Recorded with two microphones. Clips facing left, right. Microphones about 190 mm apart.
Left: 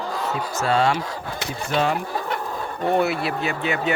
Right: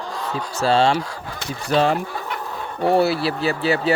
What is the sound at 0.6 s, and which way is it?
Speech, 30° right (ahead or behind).